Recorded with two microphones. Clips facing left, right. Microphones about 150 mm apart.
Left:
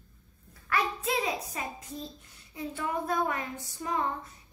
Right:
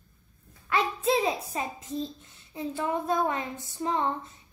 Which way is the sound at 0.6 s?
25° right (ahead or behind).